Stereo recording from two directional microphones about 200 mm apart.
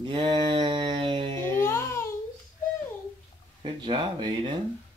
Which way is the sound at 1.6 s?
15° left (ahead or behind).